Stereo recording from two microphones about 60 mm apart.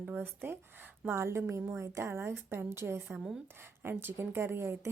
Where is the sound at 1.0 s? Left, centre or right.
Right.